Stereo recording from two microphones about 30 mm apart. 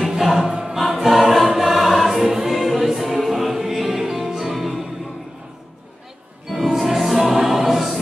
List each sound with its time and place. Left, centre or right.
0.2 s music: centre
0.5 s choir: centre
1.0 s choir: centre
2.7 s music: centre
6.5 s music: centre